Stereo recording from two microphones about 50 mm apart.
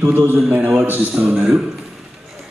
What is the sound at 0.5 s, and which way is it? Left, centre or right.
A man's voice, right.